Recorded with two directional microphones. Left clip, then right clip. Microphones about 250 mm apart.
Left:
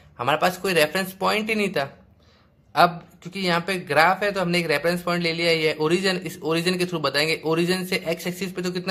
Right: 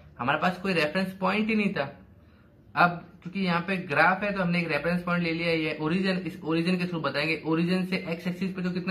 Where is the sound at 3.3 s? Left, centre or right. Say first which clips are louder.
Left 5 dB; left.